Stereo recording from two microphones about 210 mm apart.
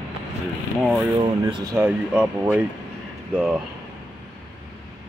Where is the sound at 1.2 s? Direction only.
25° right (ahead or behind).